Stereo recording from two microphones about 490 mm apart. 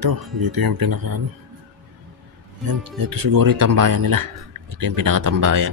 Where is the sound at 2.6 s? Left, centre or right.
Right.